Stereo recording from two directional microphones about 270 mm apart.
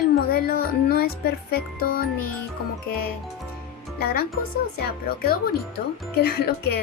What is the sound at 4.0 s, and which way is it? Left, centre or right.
Speech, left.